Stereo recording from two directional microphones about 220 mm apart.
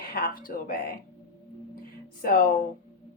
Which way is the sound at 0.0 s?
40° left (ahead or behind).